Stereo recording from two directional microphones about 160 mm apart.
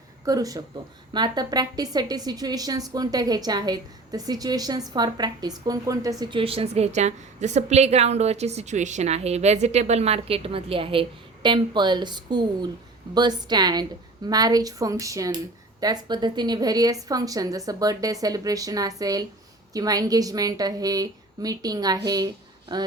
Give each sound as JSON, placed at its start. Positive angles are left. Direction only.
{"t": 0.3, "sound": "a woman's voice", "side_deg": -25}
{"t": 6.4, "sound": "a woman's voice", "side_deg": -35}